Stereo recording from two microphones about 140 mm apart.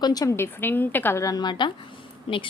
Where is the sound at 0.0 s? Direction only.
25° left (ahead or behind).